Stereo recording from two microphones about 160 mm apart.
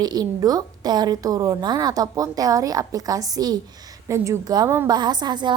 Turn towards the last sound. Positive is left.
turn(degrees=-25)  # may be behind; listen again after turning